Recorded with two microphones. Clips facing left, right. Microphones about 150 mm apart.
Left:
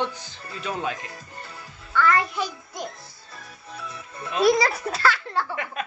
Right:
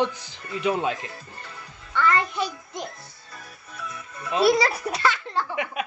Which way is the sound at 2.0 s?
5° left (ahead or behind).